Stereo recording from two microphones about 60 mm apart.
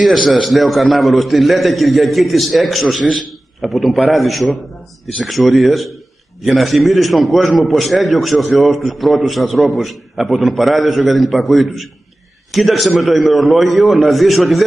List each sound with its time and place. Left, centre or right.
0.0 s a man's voice: centre